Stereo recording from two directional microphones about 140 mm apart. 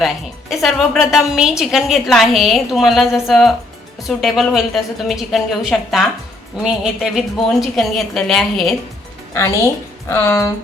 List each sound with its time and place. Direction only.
0.5 s a woman's voice: centre (ahead or behind)
9.3 s a woman's voice: 20° left (ahead or behind)